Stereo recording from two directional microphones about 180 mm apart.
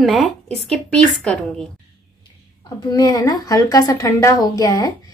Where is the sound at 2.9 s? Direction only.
20° left (ahead or behind).